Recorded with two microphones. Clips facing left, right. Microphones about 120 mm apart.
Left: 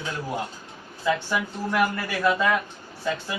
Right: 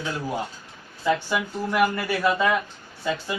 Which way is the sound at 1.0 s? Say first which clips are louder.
Right 1 dB; 5° right (ahead or behind).